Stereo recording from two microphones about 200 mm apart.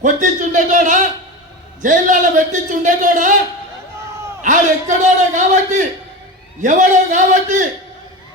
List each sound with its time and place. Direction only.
0.0 s a sound: 40° right (ahead or behind)
1.8 s a man's voice: 40° right (ahead or behind)
4.4 s a man's voice: 40° right (ahead or behind)